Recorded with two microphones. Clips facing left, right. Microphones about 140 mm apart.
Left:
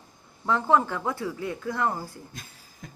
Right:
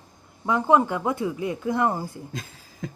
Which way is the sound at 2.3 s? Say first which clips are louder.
Right 9 dB; 90° right.